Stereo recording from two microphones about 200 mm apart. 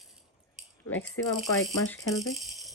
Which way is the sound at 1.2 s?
15° left (ahead or behind).